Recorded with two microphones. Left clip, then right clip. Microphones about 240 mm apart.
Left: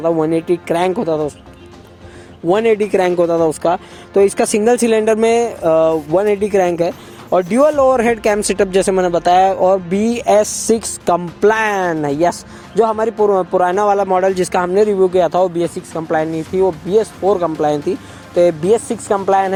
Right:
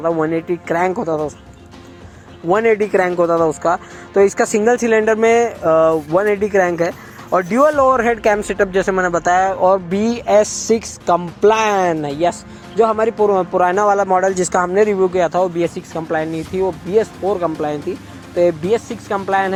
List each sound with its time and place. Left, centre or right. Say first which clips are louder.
0.0 s speech: left 2 dB; left
2.5 s speech: left 1 dB; left
14.7 s speech: left 2 dB; left